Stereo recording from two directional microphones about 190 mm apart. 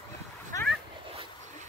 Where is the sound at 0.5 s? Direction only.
15° left (ahead or behind).